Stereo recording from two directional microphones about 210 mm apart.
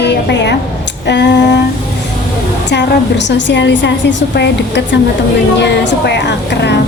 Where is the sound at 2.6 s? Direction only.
55° left (ahead or behind).